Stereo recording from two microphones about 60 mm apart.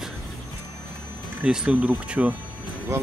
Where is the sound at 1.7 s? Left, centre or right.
Right.